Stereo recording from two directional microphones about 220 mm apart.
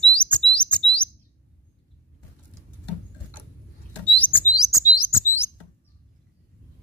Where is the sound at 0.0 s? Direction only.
5° left (ahead or behind).